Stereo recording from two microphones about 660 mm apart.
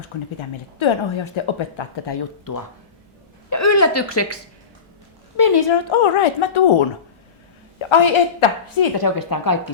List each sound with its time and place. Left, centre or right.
0.3 s a woman's voice: left
2.0 s speech: left
5.4 s a woman's voice: left